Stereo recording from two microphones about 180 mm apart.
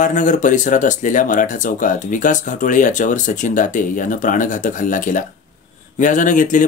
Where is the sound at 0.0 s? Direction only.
45° left (ahead or behind).